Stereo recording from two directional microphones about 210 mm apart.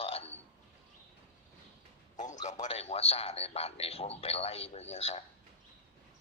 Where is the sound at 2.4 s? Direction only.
35° left (ahead or behind).